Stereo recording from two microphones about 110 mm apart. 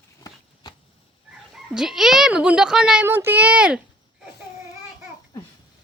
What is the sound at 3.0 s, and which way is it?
A child's voice, 20° right (ahead or behind).